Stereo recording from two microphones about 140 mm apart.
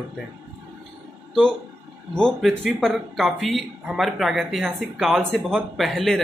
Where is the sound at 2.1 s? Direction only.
5° left (ahead or behind).